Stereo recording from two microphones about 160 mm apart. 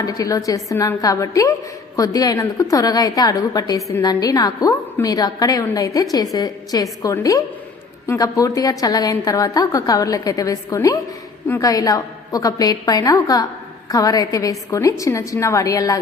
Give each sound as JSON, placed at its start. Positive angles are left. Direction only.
{"t": 0.0, "sound": "a woman's voice", "side_deg": 20}
{"t": 11.7, "sound": "a woman's voice", "side_deg": 20}